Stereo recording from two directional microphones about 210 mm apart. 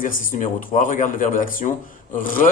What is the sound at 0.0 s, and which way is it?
A man's voice, 40° left (ahead or behind).